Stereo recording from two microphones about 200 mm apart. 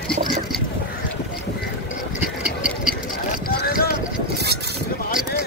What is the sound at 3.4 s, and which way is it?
Boat, 50° left (ahead or behind).